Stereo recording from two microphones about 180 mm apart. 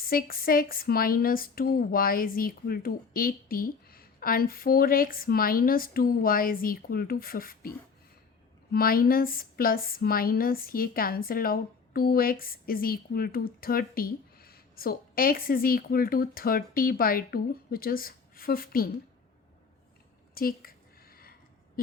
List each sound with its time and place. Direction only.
0.0 s speech: 55° left (ahead or behind)
8.7 s speech: 55° left (ahead or behind)
20.3 s a sound: 55° left (ahead or behind)